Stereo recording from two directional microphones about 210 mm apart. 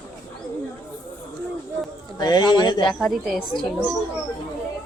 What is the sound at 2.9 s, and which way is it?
Speech, centre (ahead or behind).